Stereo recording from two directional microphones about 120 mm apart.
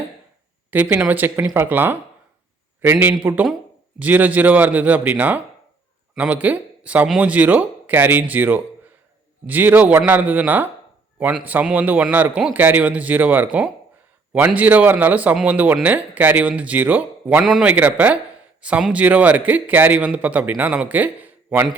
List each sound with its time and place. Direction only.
0.7 s speech: 15° right (ahead or behind)
17.4 s a man's voice: 5° right (ahead or behind)
17.7 s speech: 15° right (ahead or behind)